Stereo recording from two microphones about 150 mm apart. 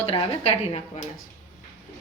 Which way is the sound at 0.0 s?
40° left (ahead or behind).